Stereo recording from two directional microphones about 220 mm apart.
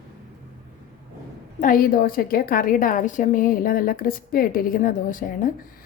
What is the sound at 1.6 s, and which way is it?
A woman's voice, 40° left (ahead or behind).